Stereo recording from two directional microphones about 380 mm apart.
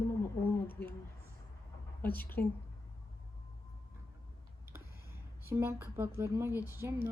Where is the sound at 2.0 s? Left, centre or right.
Centre.